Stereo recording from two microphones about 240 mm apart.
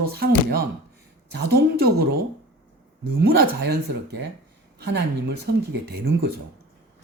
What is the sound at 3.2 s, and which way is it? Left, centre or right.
Speech, right.